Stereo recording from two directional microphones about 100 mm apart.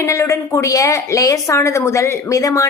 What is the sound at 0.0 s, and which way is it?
A woman's voice, 30° left (ahead or behind).